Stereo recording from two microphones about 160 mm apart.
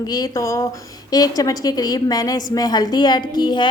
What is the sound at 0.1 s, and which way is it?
A woman's voice, 20° left (ahead or behind).